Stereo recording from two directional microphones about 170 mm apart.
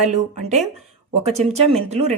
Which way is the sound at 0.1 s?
45° right (ahead or behind).